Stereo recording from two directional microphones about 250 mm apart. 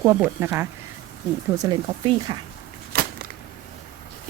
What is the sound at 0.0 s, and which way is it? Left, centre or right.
A woman's voice, centre.